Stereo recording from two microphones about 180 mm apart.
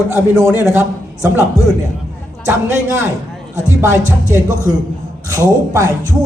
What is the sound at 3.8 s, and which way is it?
Speech, 15° right (ahead or behind).